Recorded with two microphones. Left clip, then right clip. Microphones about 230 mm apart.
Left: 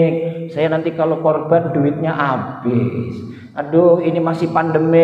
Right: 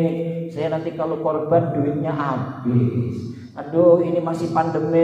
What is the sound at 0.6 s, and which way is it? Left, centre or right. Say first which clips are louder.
A man's voice: left 7 dB; left.